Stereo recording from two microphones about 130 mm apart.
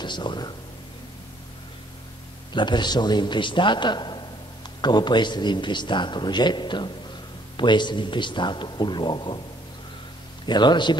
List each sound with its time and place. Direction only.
0.0 s speech: 35° left (ahead or behind)
2.5 s a man's voice: 35° left (ahead or behind)
10.4 s a man's voice: 35° left (ahead or behind)